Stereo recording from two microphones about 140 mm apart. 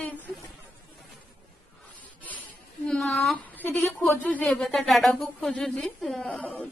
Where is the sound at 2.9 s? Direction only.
5° left (ahead or behind).